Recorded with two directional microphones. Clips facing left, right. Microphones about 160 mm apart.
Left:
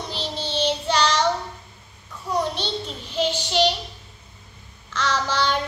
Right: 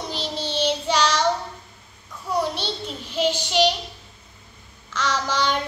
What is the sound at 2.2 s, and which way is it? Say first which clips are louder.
Child singing: even; 10° right (ahead or behind).